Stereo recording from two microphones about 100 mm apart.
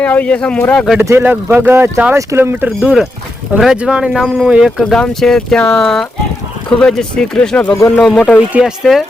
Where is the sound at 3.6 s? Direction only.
5° right (ahead or behind).